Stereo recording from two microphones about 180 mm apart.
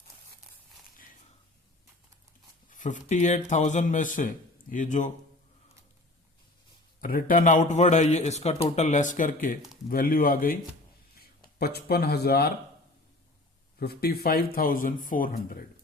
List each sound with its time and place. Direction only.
2.6 s speech: 45° left (ahead or behind)
7.0 s speech: 50° left (ahead or behind)
13.7 s speech: 60° left (ahead or behind)